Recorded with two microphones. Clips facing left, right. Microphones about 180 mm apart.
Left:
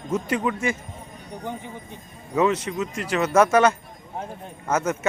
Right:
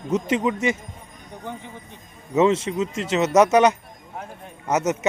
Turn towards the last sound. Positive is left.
turn(degrees=-20)  # may be behind; listen again after turning